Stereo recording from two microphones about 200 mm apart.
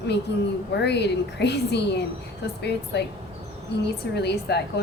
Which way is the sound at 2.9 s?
55° left (ahead or behind).